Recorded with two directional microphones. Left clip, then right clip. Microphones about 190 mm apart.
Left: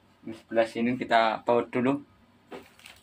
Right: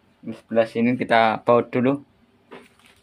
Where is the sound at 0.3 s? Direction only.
50° right (ahead or behind).